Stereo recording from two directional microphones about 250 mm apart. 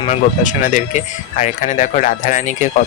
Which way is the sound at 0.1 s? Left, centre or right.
Left.